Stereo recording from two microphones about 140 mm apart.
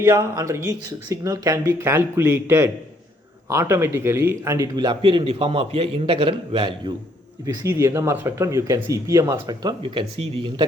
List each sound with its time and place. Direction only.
0.0 s a man's voice: 25° right (ahead or behind)
7.7 s speech: 20° right (ahead or behind); by 10.7 s 35° right (ahead or behind)